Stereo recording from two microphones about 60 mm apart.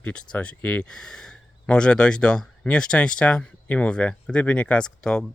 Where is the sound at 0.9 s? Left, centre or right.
Centre.